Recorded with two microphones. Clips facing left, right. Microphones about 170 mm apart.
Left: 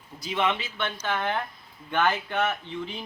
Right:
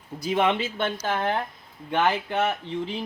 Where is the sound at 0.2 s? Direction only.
50° right (ahead or behind).